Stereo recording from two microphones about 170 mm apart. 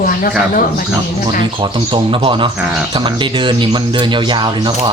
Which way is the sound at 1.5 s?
30° right (ahead or behind).